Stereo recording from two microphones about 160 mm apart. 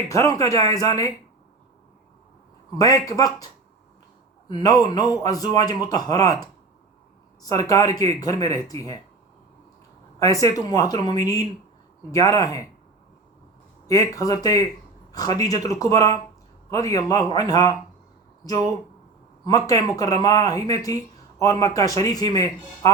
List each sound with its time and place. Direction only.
0.1 s speech: 20° left (ahead or behind)
2.7 s speech: 25° left (ahead or behind)
7.7 s speech: 25° left (ahead or behind)
10.2 s speech: 20° left (ahead or behind)
13.8 s speech: 20° left (ahead or behind)